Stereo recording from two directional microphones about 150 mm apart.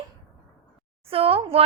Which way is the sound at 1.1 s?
40° right (ahead or behind).